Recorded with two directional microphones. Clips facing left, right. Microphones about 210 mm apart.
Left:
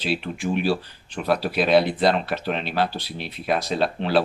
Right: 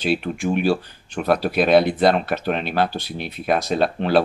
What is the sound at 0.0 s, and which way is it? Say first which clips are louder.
Speech: right 4 dB; 50° right (ahead or behind).